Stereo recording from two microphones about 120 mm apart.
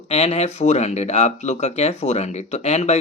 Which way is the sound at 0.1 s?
65° left (ahead or behind).